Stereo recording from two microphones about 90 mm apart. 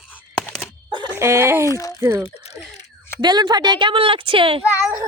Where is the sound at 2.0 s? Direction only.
30° right (ahead or behind).